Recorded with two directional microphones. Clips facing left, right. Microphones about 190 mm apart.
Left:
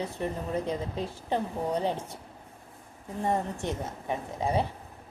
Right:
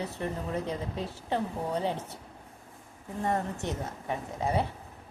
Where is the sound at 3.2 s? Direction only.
10° left (ahead or behind).